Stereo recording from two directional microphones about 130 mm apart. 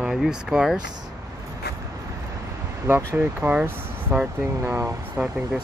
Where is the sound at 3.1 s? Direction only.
15° right (ahead or behind).